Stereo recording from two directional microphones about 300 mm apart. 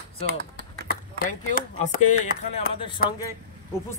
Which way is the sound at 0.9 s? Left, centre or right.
Left.